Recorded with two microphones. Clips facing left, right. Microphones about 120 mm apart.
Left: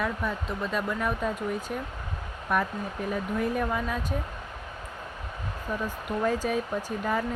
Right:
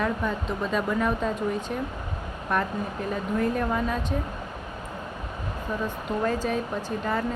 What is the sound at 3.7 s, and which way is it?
Speech, 5° left (ahead or behind).